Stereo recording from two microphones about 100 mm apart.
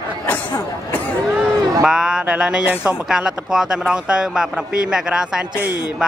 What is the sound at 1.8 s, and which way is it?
A man's voice, 5° right (ahead or behind).